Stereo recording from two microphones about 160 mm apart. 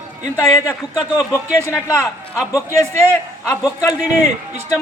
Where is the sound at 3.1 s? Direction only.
Centre (ahead or behind).